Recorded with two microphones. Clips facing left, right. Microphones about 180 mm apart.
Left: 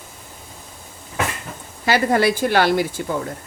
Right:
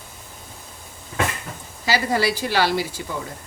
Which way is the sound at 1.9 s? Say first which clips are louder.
Left 4 dB; 55° left (ahead or behind).